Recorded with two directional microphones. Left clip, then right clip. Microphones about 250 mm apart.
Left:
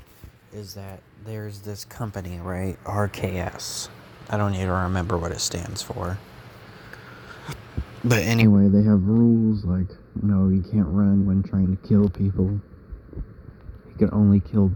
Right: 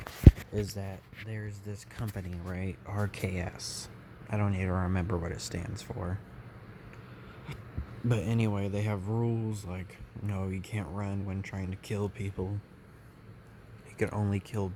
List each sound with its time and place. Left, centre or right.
0.5 s speech: right
1.3 s speech: centre
8.0 s speech: centre
8.9 s speech: centre
14.0 s speech: right